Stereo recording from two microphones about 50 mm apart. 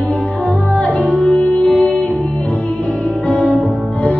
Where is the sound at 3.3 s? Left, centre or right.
Left.